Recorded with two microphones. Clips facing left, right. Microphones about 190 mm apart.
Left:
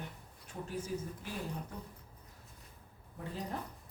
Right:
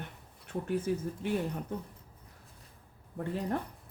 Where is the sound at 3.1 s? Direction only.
60° right (ahead or behind).